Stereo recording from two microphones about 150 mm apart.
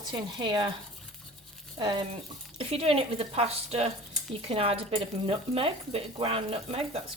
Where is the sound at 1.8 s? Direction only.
30° right (ahead or behind).